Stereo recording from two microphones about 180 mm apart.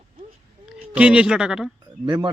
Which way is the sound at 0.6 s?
5° right (ahead or behind).